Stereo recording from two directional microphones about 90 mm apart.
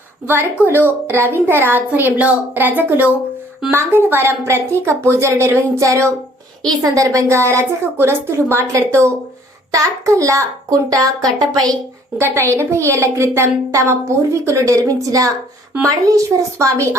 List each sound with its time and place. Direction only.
0.3 s a woman's voice: 25° right (ahead or behind); by 11.8 s 45° right (ahead or behind)
12.1 s a woman's voice: 30° right (ahead or behind)